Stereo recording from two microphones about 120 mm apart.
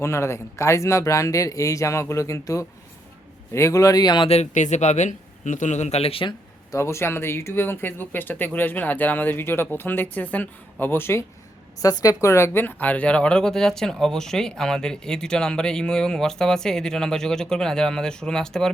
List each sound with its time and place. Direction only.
0.0 s speech: 20° left (ahead or behind)
4.3 s speech: 75° left (ahead or behind); by 6.3 s 50° left (ahead or behind)
6.7 s speech: 25° left (ahead or behind)
11.8 s speech: 30° left (ahead or behind); by 18.7 s 5° left (ahead or behind)